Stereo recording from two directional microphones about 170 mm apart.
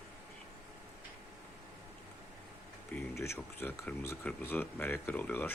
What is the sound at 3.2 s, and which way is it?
Speech, 15° left (ahead or behind).